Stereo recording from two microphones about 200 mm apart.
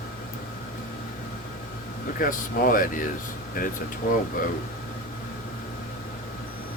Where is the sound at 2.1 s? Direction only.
45° left (ahead or behind).